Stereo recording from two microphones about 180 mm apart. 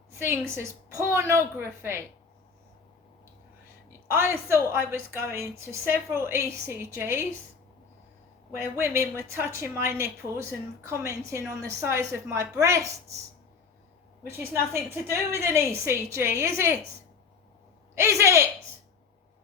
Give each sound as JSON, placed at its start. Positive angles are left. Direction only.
{"t": 0.1, "sound": "a sound", "side_deg": -15}
{"t": 0.9, "sound": "a woman's voice", "side_deg": -15}
{"t": 3.8, "sound": "a woman's voice", "side_deg": -15}
{"t": 8.5, "sound": "a woman's voice", "side_deg": -15}
{"t": 14.3, "sound": "a woman's voice", "side_deg": -15}
{"t": 17.9, "sound": "a woman's voice", "side_deg": -15}